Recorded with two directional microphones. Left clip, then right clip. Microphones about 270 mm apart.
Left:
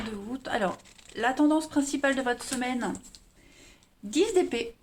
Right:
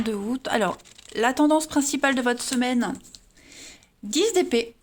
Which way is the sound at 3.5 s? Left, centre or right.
Right.